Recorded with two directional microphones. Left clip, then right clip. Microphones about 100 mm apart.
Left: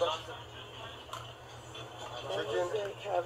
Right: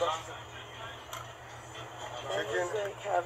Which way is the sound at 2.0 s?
25° right (ahead or behind).